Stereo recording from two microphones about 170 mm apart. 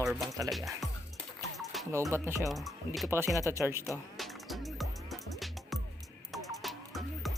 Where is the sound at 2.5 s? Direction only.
Centre (ahead or behind).